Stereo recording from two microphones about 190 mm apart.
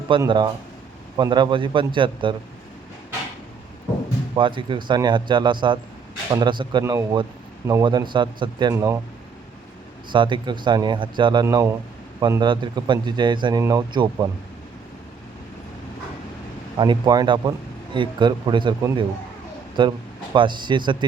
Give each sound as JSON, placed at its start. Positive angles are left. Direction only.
{"t": 0.2, "sound": "a man's voice", "side_deg": -25}
{"t": 4.4, "sound": "a man's voice", "side_deg": -25}
{"t": 10.1, "sound": "a man's voice", "side_deg": -25}
{"t": 16.7, "sound": "a man's voice", "side_deg": -25}